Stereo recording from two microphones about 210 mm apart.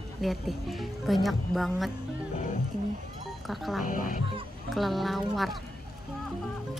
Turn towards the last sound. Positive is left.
turn(degrees=0)  # may be behind; listen again after turning